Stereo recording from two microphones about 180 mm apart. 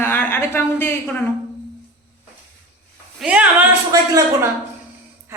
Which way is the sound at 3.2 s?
10° right (ahead or behind).